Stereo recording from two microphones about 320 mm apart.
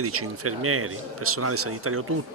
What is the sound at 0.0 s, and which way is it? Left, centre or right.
A man's voice, right.